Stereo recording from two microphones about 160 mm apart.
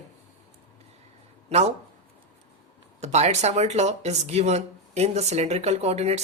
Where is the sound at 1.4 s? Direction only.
40° right (ahead or behind).